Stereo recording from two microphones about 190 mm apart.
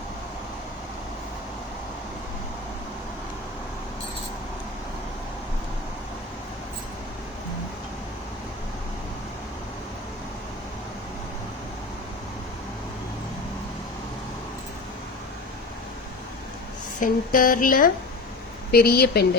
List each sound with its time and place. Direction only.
17.0 s speech: 45° left (ahead or behind)